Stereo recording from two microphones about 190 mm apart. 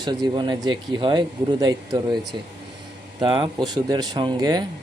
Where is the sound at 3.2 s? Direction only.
20° right (ahead or behind).